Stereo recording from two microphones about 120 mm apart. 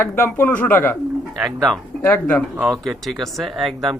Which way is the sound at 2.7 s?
Centre (ahead or behind).